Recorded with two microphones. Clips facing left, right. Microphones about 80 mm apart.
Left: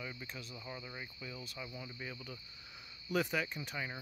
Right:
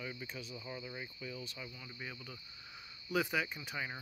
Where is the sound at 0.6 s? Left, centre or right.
Centre.